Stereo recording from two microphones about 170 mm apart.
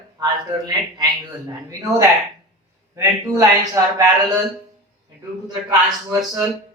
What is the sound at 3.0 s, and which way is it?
Speech, 20° right (ahead or behind).